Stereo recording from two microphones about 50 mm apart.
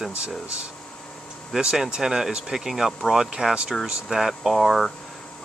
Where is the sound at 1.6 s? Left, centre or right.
Centre.